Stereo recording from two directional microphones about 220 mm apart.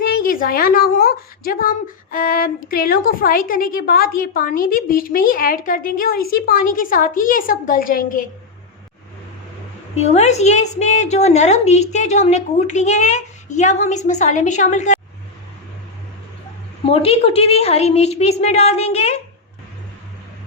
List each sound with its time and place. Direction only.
0.0 s a woman's voice: 40° left (ahead or behind)
9.9 s a woman's voice: 30° left (ahead or behind)
16.8 s a woman's voice: 25° left (ahead or behind)